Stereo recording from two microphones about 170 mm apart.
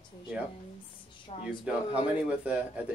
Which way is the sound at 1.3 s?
35° left (ahead or behind).